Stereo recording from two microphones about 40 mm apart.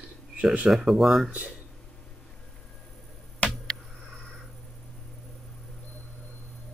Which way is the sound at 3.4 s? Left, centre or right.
Left.